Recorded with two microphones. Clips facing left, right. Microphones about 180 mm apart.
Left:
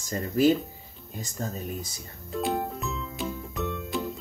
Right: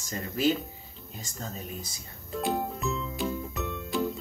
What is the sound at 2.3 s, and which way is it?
Music, centre (ahead or behind).